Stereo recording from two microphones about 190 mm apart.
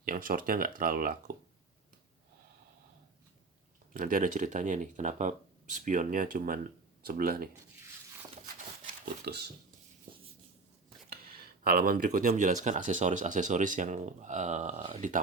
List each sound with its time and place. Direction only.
0.0 s speech: 50° right (ahead or behind)
3.9 s speech: 45° right (ahead or behind)
8.8 s speech: 60° right (ahead or behind)
11.3 s speech: 50° right (ahead or behind); by 15.1 s 35° right (ahead or behind)